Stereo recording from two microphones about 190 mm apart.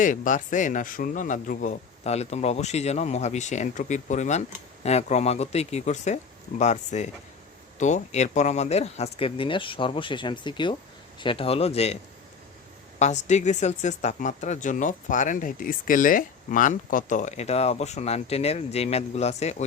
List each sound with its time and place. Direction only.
0.0 s speech: 40° left (ahead or behind)
13.0 s speech: 40° left (ahead or behind)